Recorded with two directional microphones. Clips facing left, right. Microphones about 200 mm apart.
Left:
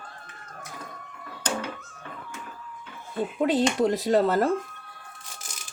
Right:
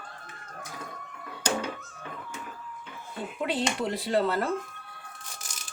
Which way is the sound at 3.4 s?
45° left (ahead or behind).